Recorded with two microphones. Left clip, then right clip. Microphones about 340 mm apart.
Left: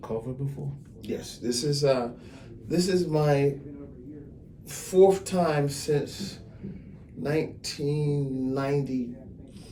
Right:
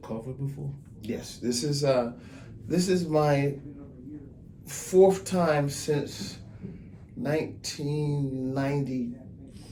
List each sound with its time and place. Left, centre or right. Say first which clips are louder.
1.0 s speech: left 1 dB; right
4.7 s speech: left 1 dB; right
7.2 s speech: left 1 dB; right